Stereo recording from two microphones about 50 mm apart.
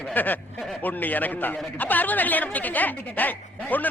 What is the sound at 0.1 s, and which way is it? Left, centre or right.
A man's voice, left.